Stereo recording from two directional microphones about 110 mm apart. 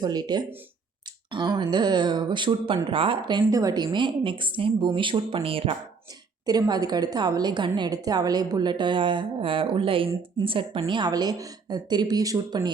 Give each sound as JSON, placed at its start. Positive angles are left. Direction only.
{"t": 0.0, "sound": "a woman's voice", "side_deg": -35}
{"t": 3.5, "sound": "a woman's voice", "side_deg": -35}
{"t": 6.4, "sound": "a woman's voice", "side_deg": -35}